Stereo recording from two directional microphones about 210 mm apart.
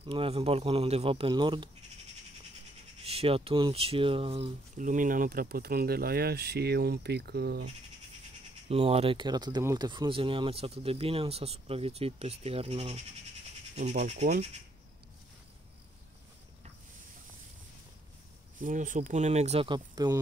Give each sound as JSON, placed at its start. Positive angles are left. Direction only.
{"t": 0.0, "sound": "speech", "side_deg": -25}
{"t": 3.1, "sound": "speech", "side_deg": -25}
{"t": 8.6, "sound": "speech", "side_deg": -30}
{"t": 18.6, "sound": "speech", "side_deg": -40}